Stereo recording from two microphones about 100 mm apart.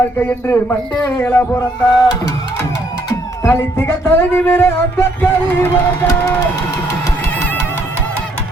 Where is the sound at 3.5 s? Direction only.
25° left (ahead or behind).